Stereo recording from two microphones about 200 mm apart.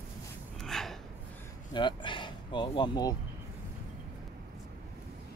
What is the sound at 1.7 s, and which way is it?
Speech, 25° left (ahead or behind).